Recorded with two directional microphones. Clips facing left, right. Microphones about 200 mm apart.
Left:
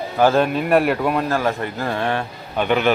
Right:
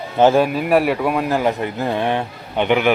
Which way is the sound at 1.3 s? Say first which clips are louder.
Right 2 dB; 20° right (ahead or behind).